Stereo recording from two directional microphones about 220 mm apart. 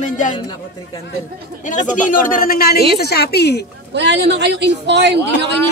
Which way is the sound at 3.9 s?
50° right (ahead or behind).